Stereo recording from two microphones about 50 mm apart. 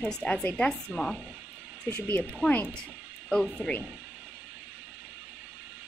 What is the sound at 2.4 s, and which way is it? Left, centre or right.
Speech, right.